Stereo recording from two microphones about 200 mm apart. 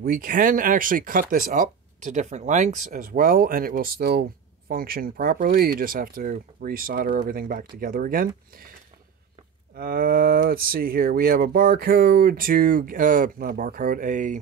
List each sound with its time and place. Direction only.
0.0 s speech: 45° right (ahead or behind)
9.8 s speech: 45° right (ahead or behind)